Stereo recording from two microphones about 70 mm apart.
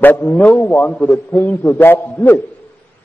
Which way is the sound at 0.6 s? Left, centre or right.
Left.